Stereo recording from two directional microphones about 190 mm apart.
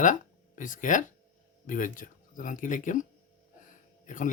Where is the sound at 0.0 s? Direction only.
40° left (ahead or behind).